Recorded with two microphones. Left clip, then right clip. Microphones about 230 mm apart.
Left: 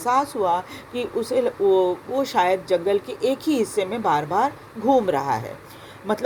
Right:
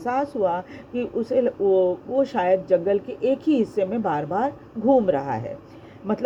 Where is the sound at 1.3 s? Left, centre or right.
Left.